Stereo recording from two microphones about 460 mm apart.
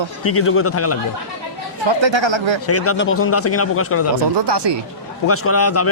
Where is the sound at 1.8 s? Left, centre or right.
Right.